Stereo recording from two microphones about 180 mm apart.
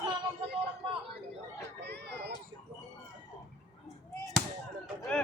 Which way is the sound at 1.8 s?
70° right (ahead or behind).